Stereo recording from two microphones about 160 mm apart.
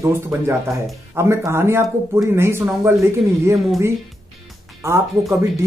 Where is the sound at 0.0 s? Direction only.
15° right (ahead or behind).